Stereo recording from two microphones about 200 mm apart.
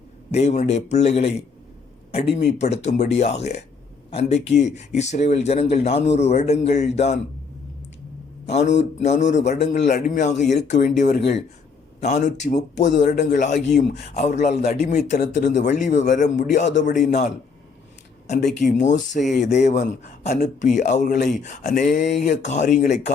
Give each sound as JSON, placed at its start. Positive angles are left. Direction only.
{"t": 0.3, "sound": "speech", "side_deg": 30}
{"t": 8.4, "sound": "speech", "side_deg": 35}
{"t": 11.2, "sound": "speech", "side_deg": 60}
{"t": 12.5, "sound": "speech", "side_deg": 35}
{"t": 18.6, "sound": "speech", "side_deg": 40}
{"t": 19.2, "sound": "speech", "side_deg": 0}
{"t": 19.5, "sound": "speech", "side_deg": 35}